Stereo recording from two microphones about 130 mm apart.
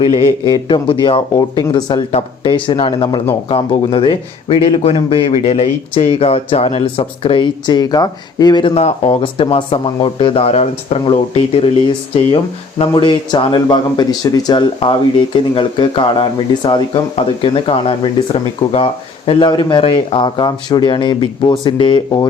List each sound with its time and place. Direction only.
0.0 s speech: 50° left (ahead or behind)
0.4 s speech: 35° left (ahead or behind)
8.7 s speech: 55° left (ahead or behind)
12.9 s speech: 40° left (ahead or behind)
14.8 s speech: 50° left (ahead or behind)